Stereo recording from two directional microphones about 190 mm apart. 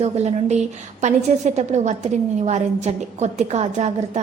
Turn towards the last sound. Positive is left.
turn(degrees=-35)  # may be behind; listen again after turning